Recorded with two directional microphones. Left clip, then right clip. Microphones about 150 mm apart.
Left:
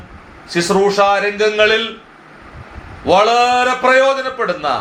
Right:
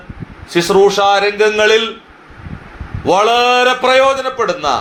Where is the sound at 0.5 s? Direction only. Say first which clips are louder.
Right 3 dB; 40° right (ahead or behind).